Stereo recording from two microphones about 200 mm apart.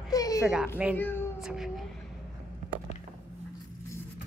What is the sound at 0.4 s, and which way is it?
Speech, 5° right (ahead or behind).